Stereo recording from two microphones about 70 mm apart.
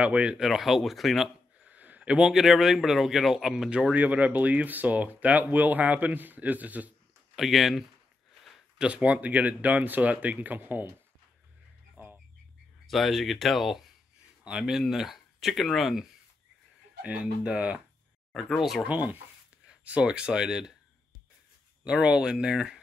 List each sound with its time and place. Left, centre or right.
0.0 s speech: centre
0.4 s speech: centre
1.6 s speech: right
7.3 s speech: centre
8.7 s speech: centre
12.0 s bird: right
12.8 s speech: centre
17.0 s speech: centre
18.3 s speech: centre
18.9 s speech: centre
21.8 s speech: centre